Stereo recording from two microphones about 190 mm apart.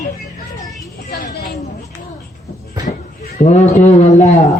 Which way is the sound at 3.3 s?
35° left (ahead or behind).